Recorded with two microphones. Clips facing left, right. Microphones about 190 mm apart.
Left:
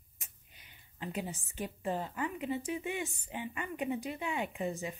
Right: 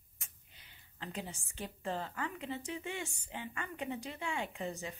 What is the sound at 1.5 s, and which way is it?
A woman's voice, 15° left (ahead or behind).